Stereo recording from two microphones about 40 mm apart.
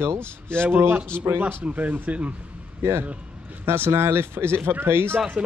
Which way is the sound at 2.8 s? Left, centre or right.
Right.